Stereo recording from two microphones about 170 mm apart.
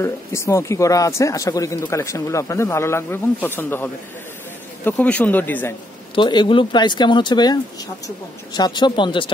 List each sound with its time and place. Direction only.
0.0 s speech: 15° left (ahead or behind)
6.1 s speech: 30° left (ahead or behind)
8.5 s speech: 25° left (ahead or behind)